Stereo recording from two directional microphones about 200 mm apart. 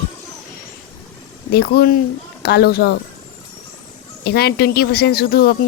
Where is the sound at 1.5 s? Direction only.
50° left (ahead or behind).